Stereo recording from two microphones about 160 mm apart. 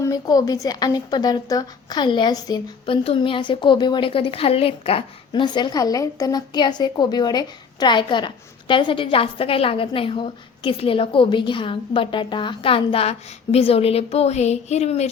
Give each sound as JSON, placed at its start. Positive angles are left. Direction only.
{"t": 0.0, "sound": "a woman's voice", "side_deg": 25}